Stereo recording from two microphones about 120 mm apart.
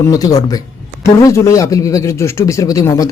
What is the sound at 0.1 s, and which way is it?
A man's voice, 30° left (ahead or behind).